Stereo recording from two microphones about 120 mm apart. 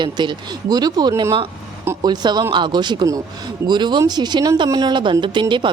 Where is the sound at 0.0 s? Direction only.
40° right (ahead or behind).